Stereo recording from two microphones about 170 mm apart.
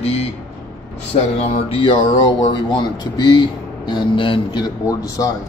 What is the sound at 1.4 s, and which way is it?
Speech, 35° left (ahead or behind).